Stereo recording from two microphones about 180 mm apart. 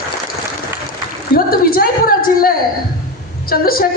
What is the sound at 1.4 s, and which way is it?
A woman's voice, 55° left (ahead or behind).